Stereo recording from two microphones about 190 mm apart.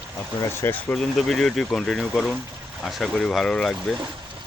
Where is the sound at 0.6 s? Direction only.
15° left (ahead or behind).